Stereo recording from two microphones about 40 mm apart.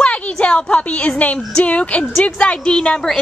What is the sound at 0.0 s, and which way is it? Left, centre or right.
Speech, left.